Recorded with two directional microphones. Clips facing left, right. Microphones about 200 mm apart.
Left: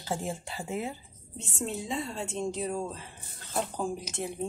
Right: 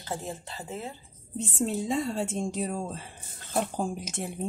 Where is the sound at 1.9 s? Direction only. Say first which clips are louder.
Right 5 dB; 45° right (ahead or behind).